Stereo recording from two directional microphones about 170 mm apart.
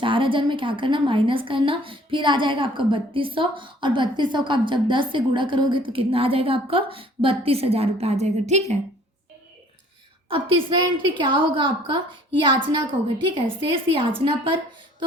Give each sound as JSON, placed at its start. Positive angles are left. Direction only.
{"t": 0.0, "sound": "a woman's voice", "side_deg": -30}
{"t": 10.2, "sound": "a woman's voice", "side_deg": -30}
{"t": 13.8, "sound": "a woman's voice", "side_deg": -30}